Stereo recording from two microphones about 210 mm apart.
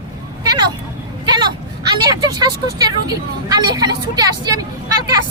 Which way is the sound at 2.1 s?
20° right (ahead or behind).